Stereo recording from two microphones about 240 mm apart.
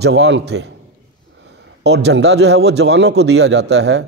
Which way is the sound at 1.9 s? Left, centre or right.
Right.